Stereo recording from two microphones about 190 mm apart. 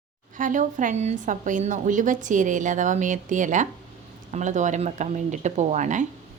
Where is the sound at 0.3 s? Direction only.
45° right (ahead or behind).